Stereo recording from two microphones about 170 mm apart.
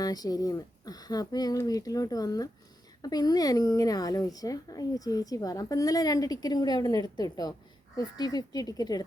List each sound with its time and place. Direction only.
0.0 s a woman's voice: 20° left (ahead or behind)